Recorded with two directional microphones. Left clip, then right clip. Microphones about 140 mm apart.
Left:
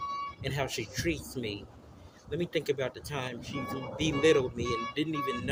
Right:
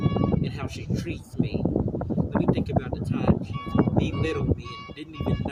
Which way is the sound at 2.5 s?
35° right (ahead or behind).